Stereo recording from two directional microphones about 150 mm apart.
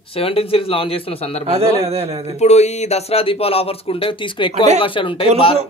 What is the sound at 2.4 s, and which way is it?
Speech, 45° left (ahead or behind).